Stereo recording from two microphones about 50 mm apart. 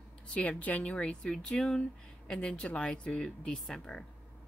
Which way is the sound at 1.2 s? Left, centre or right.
Centre.